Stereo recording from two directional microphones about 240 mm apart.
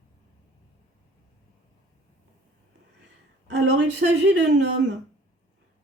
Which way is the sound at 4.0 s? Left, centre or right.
Right.